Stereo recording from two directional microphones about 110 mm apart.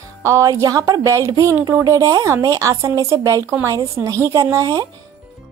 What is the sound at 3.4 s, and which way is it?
Speech, 20° right (ahead or behind).